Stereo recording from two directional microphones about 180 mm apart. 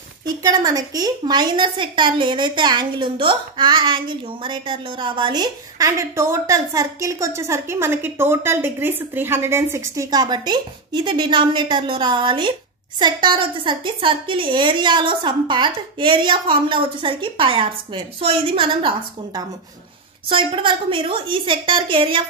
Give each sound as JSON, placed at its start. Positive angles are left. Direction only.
{"t": 0.4, "sound": "a woman's voice", "side_deg": -20}